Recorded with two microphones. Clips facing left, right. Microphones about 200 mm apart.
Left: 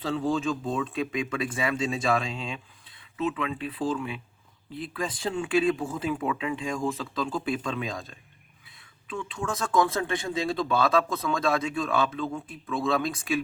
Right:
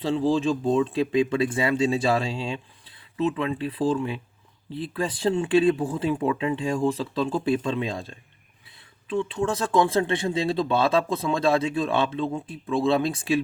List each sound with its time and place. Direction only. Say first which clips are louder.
0.0 s speech: right 5 dB; 30° right (ahead or behind)